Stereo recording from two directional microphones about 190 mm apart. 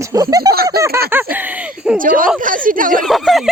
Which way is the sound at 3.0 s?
Centre (ahead or behind).